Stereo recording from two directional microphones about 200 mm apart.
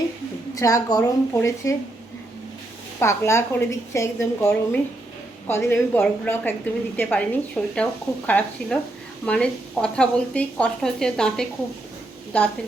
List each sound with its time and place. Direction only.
0.5 s a woman's voice: 15° left (ahead or behind)
3.0 s a woman's voice: 15° left (ahead or behind)